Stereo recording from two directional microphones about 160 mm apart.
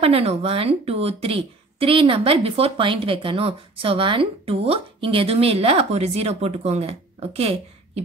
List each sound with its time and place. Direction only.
0.0 s a woman's voice: 40° right (ahead or behind)